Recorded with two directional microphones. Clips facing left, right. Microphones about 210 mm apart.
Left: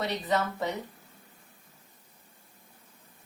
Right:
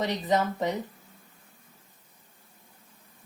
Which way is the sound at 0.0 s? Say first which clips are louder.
Right 3 dB; 15° right (ahead or behind).